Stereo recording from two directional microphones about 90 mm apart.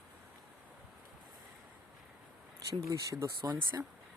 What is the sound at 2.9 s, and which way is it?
Speech, 35° right (ahead or behind).